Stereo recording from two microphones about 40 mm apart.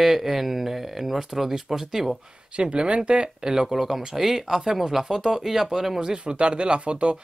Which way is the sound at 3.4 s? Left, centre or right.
Centre.